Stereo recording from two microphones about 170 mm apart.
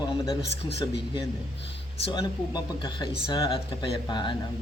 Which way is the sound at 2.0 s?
30° left (ahead or behind).